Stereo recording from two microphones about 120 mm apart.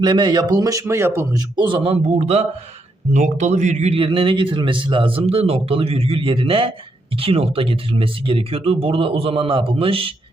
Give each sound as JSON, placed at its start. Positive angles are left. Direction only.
{"t": 0.0, "sound": "speech", "side_deg": -40}
{"t": 1.4, "sound": "a man's voice", "side_deg": -40}
{"t": 3.1, "sound": "speech", "side_deg": -90}
{"t": 3.9, "sound": "speech", "side_deg": -50}